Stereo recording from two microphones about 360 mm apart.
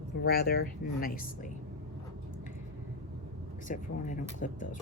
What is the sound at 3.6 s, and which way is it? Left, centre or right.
Speech, left.